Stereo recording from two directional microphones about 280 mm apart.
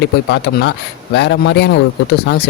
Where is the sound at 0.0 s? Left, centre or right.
Left.